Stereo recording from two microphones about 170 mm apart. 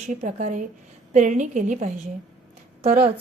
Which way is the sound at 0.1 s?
50° right (ahead or behind).